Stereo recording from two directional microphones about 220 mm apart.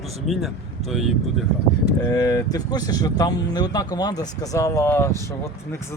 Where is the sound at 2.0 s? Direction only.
15° left (ahead or behind).